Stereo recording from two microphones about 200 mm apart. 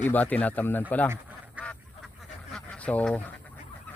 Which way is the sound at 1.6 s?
5° right (ahead or behind).